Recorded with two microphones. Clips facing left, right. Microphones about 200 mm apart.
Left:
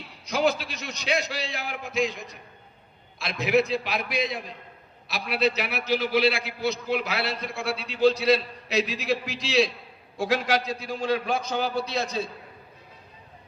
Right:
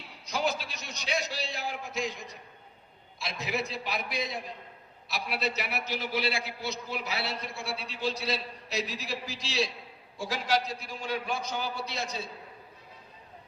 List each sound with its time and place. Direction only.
0.3 s a man's voice: 70° left (ahead or behind); by 2.0 s 90° left
3.2 s a man's voice: 75° left (ahead or behind)